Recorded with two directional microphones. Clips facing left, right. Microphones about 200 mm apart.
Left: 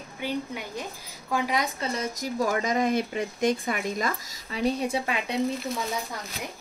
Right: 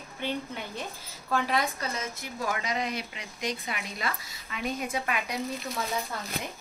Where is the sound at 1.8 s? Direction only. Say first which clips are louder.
Left 5 dB; 35° left (ahead or behind).